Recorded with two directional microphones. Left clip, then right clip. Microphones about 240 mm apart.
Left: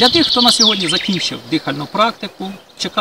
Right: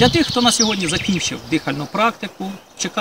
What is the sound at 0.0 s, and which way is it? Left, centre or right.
Speech, centre.